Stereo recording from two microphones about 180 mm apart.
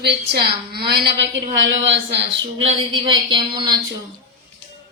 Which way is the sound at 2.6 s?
25° right (ahead or behind).